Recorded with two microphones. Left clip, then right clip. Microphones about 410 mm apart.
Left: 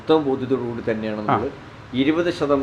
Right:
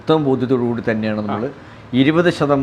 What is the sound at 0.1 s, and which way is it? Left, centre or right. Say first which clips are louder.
Speech: right 2 dB; right.